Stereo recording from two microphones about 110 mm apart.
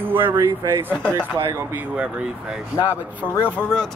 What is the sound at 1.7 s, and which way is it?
Speech, 10° right (ahead or behind).